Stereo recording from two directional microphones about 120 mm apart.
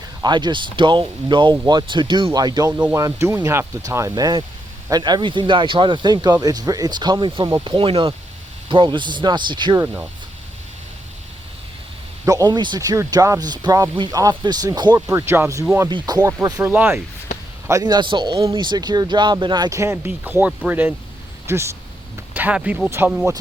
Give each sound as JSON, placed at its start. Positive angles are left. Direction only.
{"t": 0.2, "sound": "speech", "side_deg": -40}
{"t": 9.8, "sound": "speech", "side_deg": -15}
{"t": 12.2, "sound": "speech", "side_deg": -30}
{"t": 15.0, "sound": "speech", "side_deg": -20}
{"t": 15.9, "sound": "speech", "side_deg": -35}
{"t": 16.6, "sound": "speech", "side_deg": -15}
{"t": 17.7, "sound": "speech", "side_deg": -30}
{"t": 19.7, "sound": "speech", "side_deg": -25}